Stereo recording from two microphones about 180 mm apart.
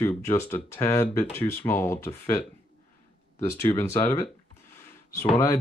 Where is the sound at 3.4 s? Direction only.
15° left (ahead or behind).